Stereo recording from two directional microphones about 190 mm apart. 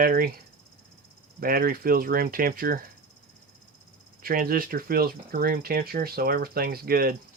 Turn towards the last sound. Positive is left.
turn(degrees=-50)  # may be behind; listen again after turning